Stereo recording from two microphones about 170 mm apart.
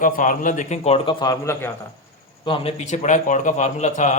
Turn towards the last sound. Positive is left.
turn(degrees=45)  # may be behind; listen again after turning